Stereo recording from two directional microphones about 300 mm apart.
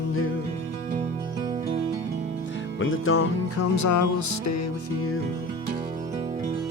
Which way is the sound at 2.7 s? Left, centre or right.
Left.